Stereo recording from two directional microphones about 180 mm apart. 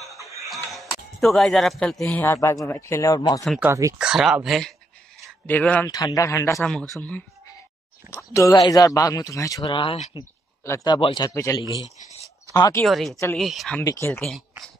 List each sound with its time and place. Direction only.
0.5 s music: centre (ahead or behind)
2.0 s speech: 15° left (ahead or behind)
3.4 s speech: 10° right (ahead or behind)
4.0 s speech: 5° right (ahead or behind)
5.9 s speech: 20° left (ahead or behind)
6.6 s speech: 5° left (ahead or behind)
8.1 s speech: 15° right (ahead or behind)
8.4 s speech: 20° left (ahead or behind)
10.1 s speech: 20° left (ahead or behind)
12.8 s speech: centre (ahead or behind)